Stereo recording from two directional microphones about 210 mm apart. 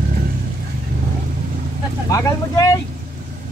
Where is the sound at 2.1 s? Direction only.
15° left (ahead or behind).